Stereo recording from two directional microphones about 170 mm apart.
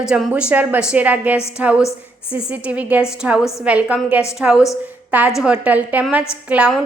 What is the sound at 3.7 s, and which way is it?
A woman's voice, 5° right (ahead or behind).